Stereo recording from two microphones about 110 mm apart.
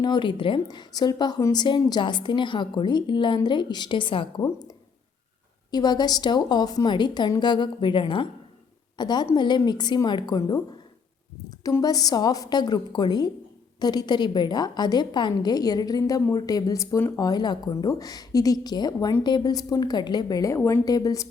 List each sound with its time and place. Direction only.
0.0 s a woman's voice: 45° left (ahead or behind)
5.7 s a woman's voice: 40° left (ahead or behind)
11.8 s a woman's voice: 35° left (ahead or behind)
20.6 s a woman's voice: 20° left (ahead or behind)
20.8 s a woman's voice: 35° left (ahead or behind)